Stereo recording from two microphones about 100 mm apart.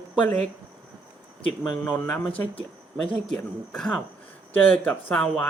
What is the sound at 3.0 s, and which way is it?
Speech, 5° left (ahead or behind).